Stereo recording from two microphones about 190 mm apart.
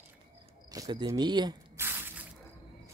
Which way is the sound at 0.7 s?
20° right (ahead or behind).